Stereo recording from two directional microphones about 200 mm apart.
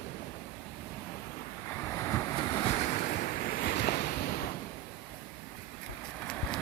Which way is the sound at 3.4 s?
45° left (ahead or behind).